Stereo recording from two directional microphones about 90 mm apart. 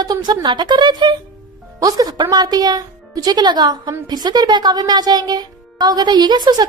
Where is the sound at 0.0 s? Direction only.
50° right (ahead or behind).